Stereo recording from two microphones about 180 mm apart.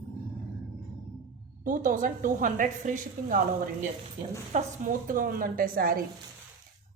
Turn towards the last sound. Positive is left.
turn(degrees=-55)  # may be behind; listen again after turning